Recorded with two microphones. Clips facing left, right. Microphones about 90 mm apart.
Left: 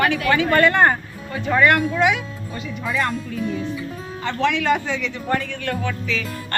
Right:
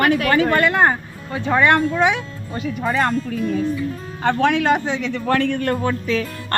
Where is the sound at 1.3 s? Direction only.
25° right (ahead or behind).